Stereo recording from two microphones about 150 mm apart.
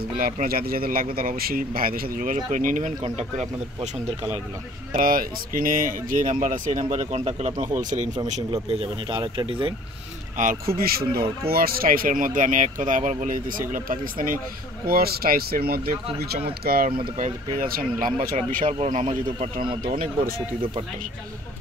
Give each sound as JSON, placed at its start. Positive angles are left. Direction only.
{"t": 0.2, "sound": "speech", "side_deg": -75}
{"t": 3.2, "sound": "speech", "side_deg": -50}
{"t": 4.9, "sound": "speech", "side_deg": -70}
{"t": 8.6, "sound": "speech", "side_deg": -35}
{"t": 10.3, "sound": "speech", "side_deg": -60}
{"t": 14.9, "sound": "speech", "side_deg": -85}
{"t": 17.2, "sound": "speech", "side_deg": -70}
{"t": 18.8, "sound": "speech", "side_deg": -50}